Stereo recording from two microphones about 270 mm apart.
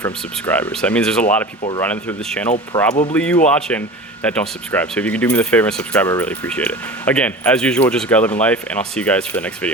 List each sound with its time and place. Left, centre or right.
0.0 s speech: centre
2.7 s speech: centre
3.1 s speech: centre